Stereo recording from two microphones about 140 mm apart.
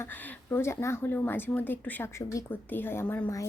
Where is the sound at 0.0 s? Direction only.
15° left (ahead or behind).